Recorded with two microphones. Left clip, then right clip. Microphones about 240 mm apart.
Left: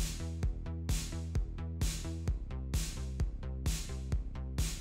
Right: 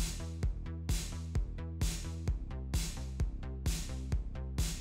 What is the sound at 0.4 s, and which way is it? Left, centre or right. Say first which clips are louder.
Music: left 1 dB; centre.